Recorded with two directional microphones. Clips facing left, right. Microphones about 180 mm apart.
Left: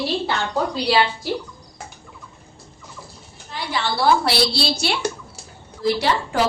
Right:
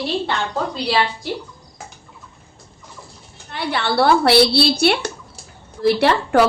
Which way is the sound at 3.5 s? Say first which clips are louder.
Right 4 dB; 60° right (ahead or behind).